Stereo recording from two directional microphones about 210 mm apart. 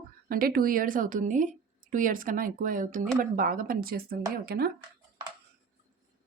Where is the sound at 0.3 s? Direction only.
45° right (ahead or behind).